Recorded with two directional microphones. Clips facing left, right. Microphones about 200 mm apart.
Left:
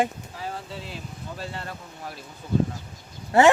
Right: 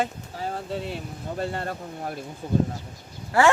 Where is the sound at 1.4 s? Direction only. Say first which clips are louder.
Right 8 dB; 50° right (ahead or behind).